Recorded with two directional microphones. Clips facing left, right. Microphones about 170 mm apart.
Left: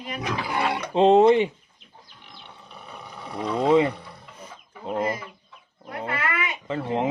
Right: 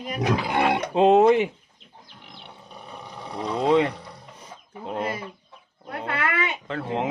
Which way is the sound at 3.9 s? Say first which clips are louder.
Right 1 dB; 35° right (ahead or behind).